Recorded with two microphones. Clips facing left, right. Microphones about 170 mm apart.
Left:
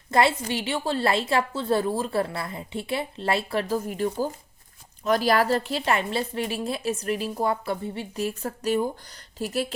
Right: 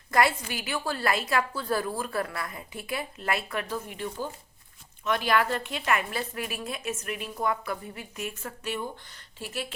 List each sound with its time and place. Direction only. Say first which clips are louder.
0.1 s a woman's voice: left 3 dB; 25° left (ahead or behind)